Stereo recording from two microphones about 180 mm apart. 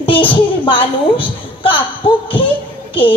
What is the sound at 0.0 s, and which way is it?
A woman's voice, 30° left (ahead or behind).